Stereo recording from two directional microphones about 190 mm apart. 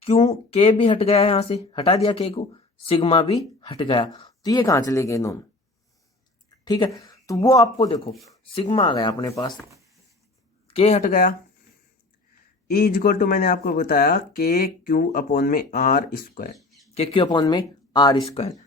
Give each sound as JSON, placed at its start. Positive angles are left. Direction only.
{"t": 0.0, "sound": "speech", "side_deg": 35}
{"t": 6.7, "sound": "speech", "side_deg": 20}
{"t": 10.7, "sound": "speech", "side_deg": 30}
{"t": 12.7, "sound": "speech", "side_deg": 50}
{"t": 16.6, "sound": "a sound", "side_deg": 0}
{"t": 16.9, "sound": "speech", "side_deg": 30}